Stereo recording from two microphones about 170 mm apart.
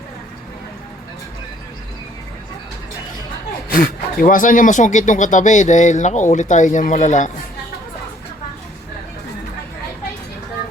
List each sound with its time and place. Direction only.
3.7 s speech: 60° left (ahead or behind)